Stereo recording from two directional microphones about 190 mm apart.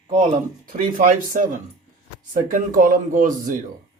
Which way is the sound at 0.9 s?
45° right (ahead or behind).